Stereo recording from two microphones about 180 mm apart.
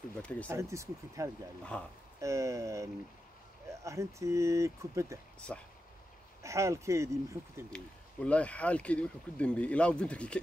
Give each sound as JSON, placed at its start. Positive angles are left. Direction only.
{"t": 0.2, "sound": "speech", "side_deg": 5}
{"t": 0.5, "sound": "speech", "side_deg": -15}
{"t": 1.6, "sound": "speech", "side_deg": 5}
{"t": 2.1, "sound": "speech", "side_deg": -15}
{"t": 5.5, "sound": "speech", "side_deg": 5}
{"t": 6.4, "sound": "speech", "side_deg": -15}
{"t": 7.7, "sound": "speech", "side_deg": 5}